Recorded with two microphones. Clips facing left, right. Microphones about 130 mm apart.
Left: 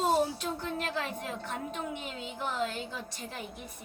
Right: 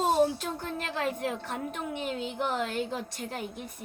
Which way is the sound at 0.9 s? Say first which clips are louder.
Right 5 dB; 55° right (ahead or behind).